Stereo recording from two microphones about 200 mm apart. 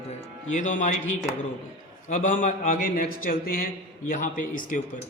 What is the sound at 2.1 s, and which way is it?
Speech, 40° left (ahead or behind).